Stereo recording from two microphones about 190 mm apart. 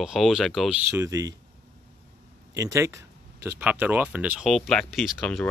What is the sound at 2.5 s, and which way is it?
Speech, 15° right (ahead or behind).